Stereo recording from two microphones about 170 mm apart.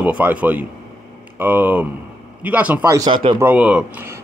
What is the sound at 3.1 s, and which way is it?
Speech, 30° right (ahead or behind).